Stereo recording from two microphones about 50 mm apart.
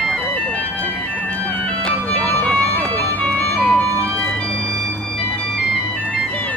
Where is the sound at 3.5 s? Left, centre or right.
Centre.